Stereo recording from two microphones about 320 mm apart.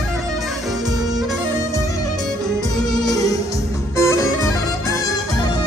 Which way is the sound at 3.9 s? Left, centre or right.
Centre.